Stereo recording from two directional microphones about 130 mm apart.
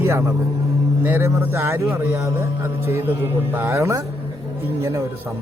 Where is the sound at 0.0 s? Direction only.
20° right (ahead or behind).